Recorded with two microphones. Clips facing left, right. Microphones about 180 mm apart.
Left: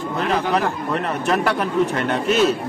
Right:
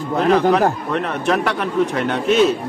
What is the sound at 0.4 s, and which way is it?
Speech, 40° right (ahead or behind).